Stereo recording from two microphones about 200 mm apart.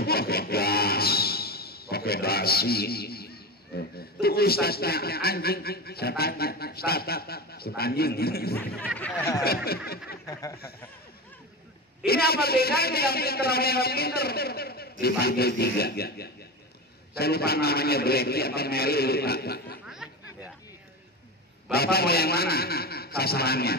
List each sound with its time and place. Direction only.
0.0 s speech: 50° left (ahead or behind)
8.5 s speech: 10° left (ahead or behind)
9.4 s a man's voice: 50° left (ahead or behind)
10.2 s speech: 15° left (ahead or behind)
12.1 s a man's voice: 50° left (ahead or behind)
19.9 s chatter: 5° right (ahead or behind)
21.7 s a man's voice: 50° left (ahead or behind)